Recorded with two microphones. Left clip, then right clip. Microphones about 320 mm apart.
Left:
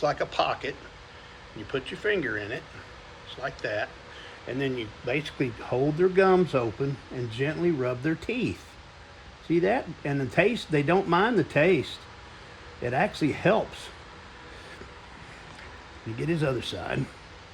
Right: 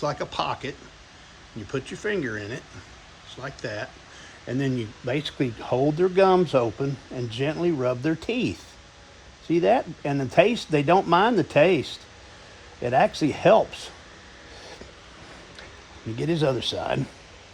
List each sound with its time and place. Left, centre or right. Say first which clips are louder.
0.0 s speech: left 1 dB; right
1.7 s speech: even; right
9.6 s speech: right 5 dB; right
12.8 s speech: right 5 dB; right
16.1 s speech: right 4 dB; right